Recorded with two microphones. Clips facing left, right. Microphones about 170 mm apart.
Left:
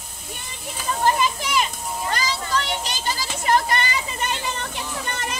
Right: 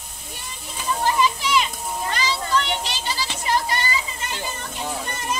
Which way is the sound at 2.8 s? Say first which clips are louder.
Left 1 dB; 45° left (ahead or behind).